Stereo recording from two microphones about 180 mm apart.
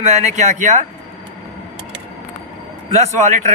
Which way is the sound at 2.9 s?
40° right (ahead or behind).